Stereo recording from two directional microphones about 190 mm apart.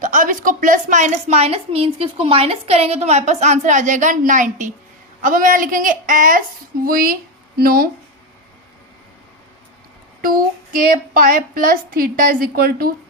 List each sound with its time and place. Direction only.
0.0 s a woman's voice: 45° right (ahead or behind)
10.2 s speech: 50° right (ahead or behind)